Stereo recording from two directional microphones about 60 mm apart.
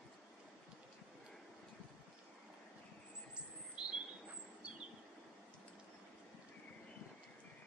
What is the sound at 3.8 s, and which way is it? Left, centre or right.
Bird, centre.